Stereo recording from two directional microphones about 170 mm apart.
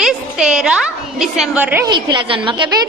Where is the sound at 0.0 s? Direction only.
5° right (ahead or behind).